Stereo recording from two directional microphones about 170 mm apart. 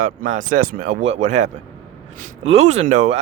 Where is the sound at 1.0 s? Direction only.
40° right (ahead or behind).